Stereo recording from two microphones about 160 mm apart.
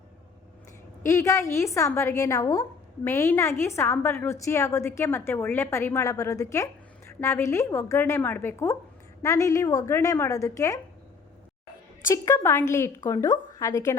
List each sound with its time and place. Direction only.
1.0 s a woman's voice: 20° left (ahead or behind)
12.0 s a woman's voice: 20° left (ahead or behind)